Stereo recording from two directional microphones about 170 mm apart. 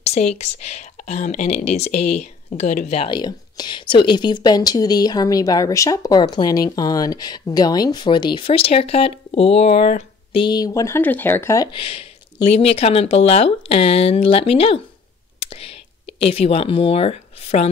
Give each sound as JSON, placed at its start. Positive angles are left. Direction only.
{"t": 0.0, "sound": "speech", "side_deg": 40}
{"t": 3.1, "sound": "speech", "side_deg": 25}
{"t": 15.3, "sound": "a sound", "side_deg": 35}